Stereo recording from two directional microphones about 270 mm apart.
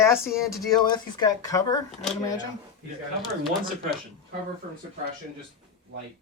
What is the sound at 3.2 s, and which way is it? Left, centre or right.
Speech, centre.